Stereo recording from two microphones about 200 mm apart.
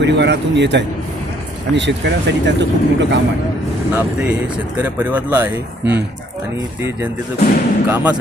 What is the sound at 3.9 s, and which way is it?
Speech, 5° right (ahead or behind).